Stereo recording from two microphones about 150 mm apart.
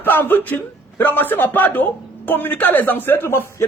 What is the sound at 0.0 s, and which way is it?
Speech, 15° left (ahead or behind).